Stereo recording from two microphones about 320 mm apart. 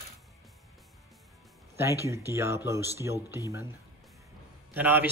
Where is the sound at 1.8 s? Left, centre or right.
Centre.